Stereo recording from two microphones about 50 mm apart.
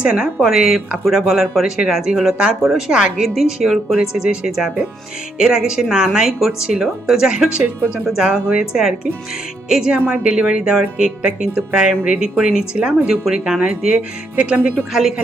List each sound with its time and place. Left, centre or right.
0.0 s speech: centre
0.4 s speech: centre
4.1 s speech: centre